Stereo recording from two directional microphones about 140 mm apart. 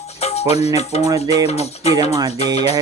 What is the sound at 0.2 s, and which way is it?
Music, 50° left (ahead or behind).